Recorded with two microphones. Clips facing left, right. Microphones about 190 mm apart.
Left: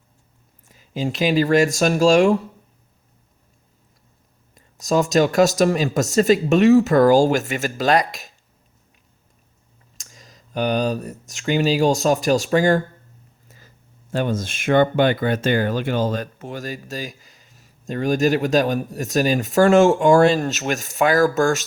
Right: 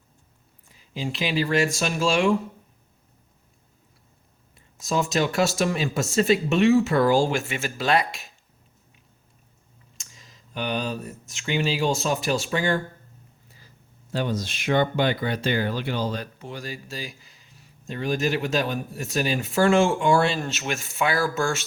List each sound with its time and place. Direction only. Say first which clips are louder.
0.7 s speech: left 6 dB; 45° left (ahead or behind)
4.5 s speech: left 6 dB; 40° left (ahead or behind)
10.0 s speech: left 5 dB; 45° left (ahead or behind)
13.5 s a sound: left 6 dB; 45° left (ahead or behind)
14.1 s speech: left 4 dB; 50° left (ahead or behind)